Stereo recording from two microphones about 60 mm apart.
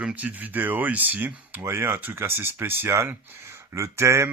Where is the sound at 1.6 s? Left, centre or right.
Right.